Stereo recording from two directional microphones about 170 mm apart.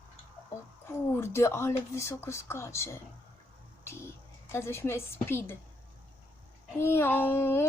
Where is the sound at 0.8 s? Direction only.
15° left (ahead or behind).